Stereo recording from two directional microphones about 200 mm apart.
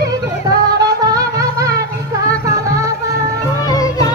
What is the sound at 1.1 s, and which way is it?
Music, 20° right (ahead or behind).